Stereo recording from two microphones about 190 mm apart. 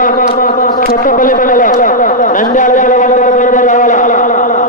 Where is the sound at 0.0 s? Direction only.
45° left (ahead or behind).